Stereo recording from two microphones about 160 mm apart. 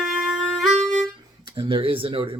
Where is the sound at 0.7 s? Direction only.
45° right (ahead or behind).